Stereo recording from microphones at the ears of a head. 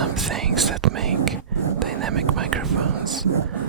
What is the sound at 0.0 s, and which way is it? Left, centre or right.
Whispering, right.